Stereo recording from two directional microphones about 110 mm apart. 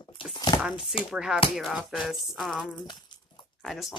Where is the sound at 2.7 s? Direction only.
45° left (ahead or behind).